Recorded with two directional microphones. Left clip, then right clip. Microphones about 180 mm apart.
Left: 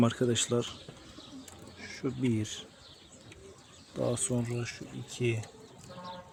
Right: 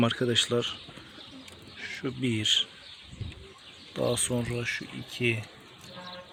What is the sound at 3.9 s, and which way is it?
Speech, centre (ahead or behind).